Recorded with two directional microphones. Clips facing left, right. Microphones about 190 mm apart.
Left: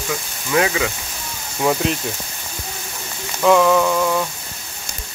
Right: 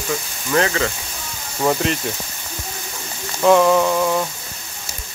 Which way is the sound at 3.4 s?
5° right (ahead or behind).